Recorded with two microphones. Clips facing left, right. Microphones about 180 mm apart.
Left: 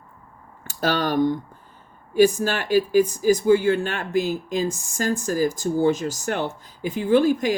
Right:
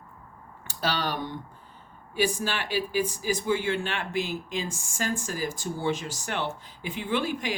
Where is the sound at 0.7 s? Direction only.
45° left (ahead or behind).